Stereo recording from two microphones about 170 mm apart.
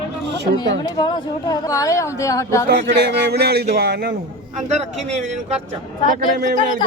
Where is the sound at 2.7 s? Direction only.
85° right.